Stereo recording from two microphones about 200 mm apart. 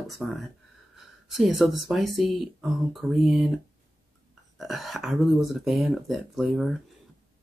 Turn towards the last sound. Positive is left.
turn(degrees=0)  # may be behind; listen again after turning